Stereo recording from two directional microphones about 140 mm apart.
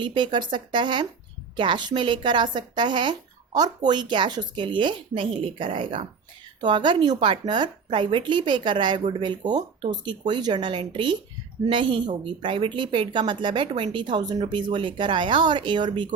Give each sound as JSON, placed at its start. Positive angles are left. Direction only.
{"t": 0.0, "sound": "a woman's voice", "side_deg": -35}